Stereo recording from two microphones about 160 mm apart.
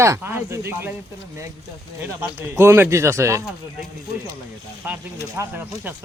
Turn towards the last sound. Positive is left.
turn(degrees=-10)  # may be behind; listen again after turning